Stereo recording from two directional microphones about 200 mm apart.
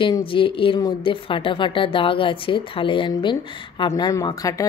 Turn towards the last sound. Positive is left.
turn(degrees=15)  # may be behind; listen again after turning